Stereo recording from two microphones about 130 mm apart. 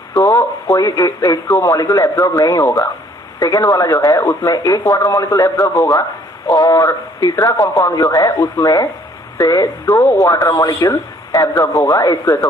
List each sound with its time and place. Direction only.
0.1 s speech: 20° left (ahead or behind)